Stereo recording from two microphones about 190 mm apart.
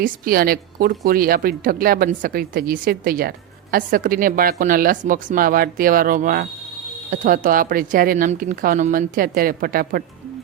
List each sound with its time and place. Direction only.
0.0 s a woman's voice: 50° right (ahead or behind)